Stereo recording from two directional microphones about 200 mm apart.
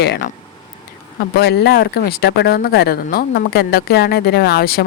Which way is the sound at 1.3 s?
55° left (ahead or behind).